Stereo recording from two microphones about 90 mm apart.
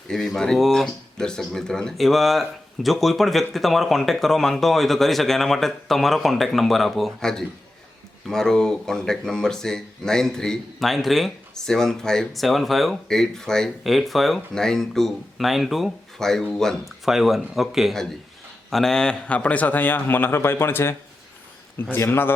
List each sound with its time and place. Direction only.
0.1 s a man's voice: 5° left (ahead or behind); by 22.3 s 25° left (ahead or behind)